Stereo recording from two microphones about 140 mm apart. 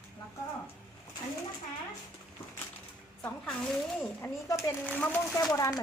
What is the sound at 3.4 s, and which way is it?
Speech, centre (ahead or behind).